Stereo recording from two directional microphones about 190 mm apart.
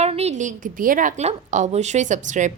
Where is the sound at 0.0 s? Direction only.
35° right (ahead or behind).